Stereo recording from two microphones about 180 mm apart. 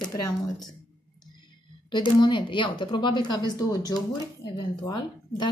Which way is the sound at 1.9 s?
25° left (ahead or behind).